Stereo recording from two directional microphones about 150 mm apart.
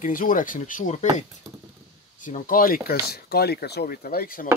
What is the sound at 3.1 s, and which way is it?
Speech, 90° left.